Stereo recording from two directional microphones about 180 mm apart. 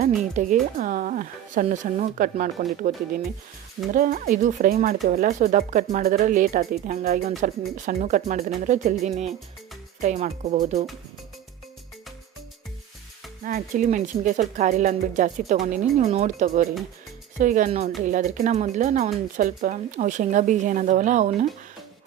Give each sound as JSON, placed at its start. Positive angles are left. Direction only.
{"t": 0.4, "sound": "speech", "side_deg": -40}
{"t": 13.4, "sound": "speech", "side_deg": -45}